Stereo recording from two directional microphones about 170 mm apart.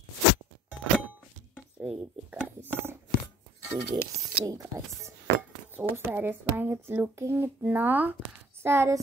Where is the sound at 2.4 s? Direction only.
15° right (ahead or behind).